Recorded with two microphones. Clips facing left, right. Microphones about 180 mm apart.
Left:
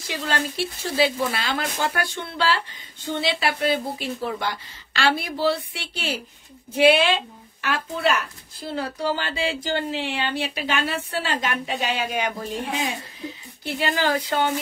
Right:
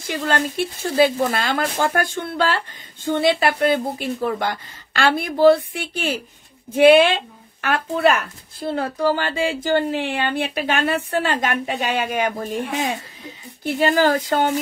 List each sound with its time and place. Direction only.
0.0 s speech: 50° right (ahead or behind)